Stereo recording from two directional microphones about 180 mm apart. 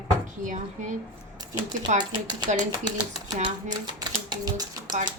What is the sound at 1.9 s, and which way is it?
Speech, 40° right (ahead or behind).